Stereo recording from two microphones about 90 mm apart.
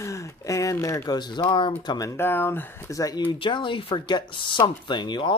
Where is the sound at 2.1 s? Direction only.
25° left (ahead or behind).